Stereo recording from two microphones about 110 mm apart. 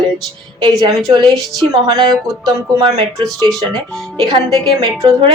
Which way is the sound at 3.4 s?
Centre (ahead or behind).